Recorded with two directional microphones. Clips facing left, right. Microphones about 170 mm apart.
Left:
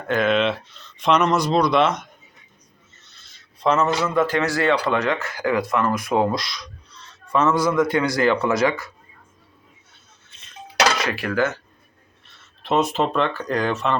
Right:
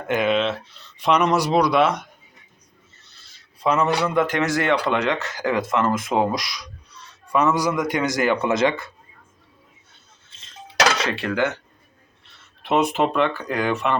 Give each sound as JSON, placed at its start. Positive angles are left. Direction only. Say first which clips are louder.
{"t": 0.1, "sound": "speech", "louder": "left 1 dB", "side_deg": -15}
{"t": 3.6, "sound": "a man's voice", "louder": "even", "side_deg": -10}
{"t": 10.9, "sound": "speech", "louder": "left 1 dB", "side_deg": -25}
{"t": 12.6, "sound": "speech", "louder": "right 1 dB", "side_deg": -15}